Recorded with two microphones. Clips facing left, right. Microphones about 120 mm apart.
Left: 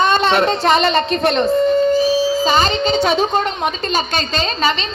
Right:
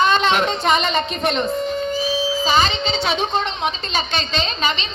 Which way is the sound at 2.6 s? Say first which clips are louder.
Left 6 dB; 45° left (ahead or behind).